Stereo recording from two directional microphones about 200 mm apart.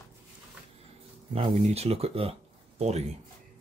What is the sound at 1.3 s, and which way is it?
Speech, 30° right (ahead or behind).